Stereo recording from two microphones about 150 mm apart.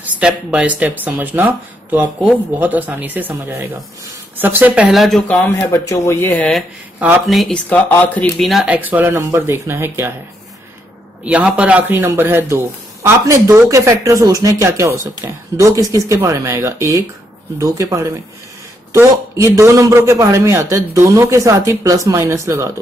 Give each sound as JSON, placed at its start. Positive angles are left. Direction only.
{"t": 0.0, "sound": "a man's voice", "side_deg": -5}
{"t": 5.4, "sound": "a man's voice", "side_deg": 15}
{"t": 11.2, "sound": "a man's voice", "side_deg": -10}